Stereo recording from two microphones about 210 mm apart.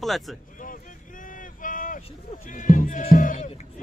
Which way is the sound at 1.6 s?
40° left (ahead or behind).